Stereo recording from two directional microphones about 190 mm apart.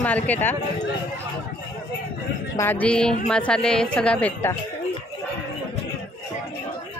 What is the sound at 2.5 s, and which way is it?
A woman's voice, 10° left (ahead or behind).